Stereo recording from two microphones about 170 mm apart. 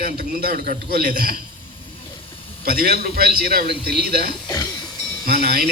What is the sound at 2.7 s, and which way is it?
Speech, 65° right (ahead or behind).